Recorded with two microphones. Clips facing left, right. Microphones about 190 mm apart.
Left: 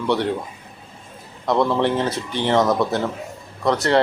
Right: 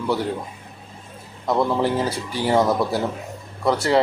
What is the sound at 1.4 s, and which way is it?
Speech, 10° right (ahead or behind).